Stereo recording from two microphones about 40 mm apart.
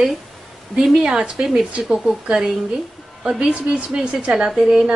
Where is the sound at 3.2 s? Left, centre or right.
Right.